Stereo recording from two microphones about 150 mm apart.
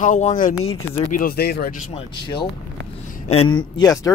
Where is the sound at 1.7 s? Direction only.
50° left (ahead or behind).